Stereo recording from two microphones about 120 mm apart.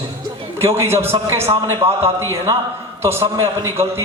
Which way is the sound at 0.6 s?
20° right (ahead or behind).